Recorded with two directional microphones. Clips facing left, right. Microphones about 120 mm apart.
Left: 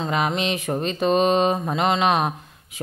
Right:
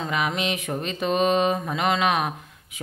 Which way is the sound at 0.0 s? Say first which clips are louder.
Left 3 dB; 30° left (ahead or behind).